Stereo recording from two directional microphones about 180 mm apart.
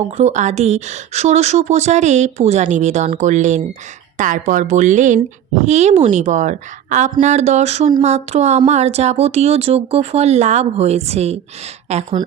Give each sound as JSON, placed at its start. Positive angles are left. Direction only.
{"t": 0.2, "sound": "speech", "side_deg": -40}